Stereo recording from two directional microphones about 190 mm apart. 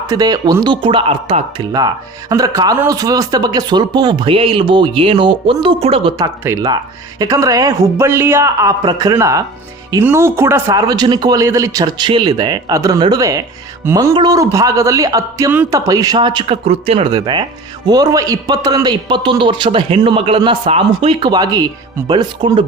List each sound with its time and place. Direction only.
0.1 s a man's voice: 20° right (ahead or behind)
17.1 s a man's voice: 20° right (ahead or behind)